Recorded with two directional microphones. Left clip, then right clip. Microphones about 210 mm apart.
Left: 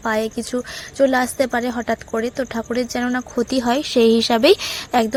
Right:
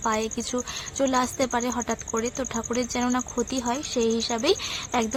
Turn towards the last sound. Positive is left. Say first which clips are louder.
# left 8 dB
turn(degrees=25)  # may be behind; listen again after turning